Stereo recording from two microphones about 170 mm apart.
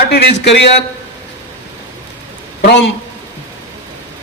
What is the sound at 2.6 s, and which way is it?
Speech, 90° left.